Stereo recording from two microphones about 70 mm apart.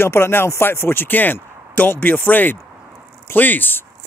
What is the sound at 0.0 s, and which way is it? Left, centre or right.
Speech, left.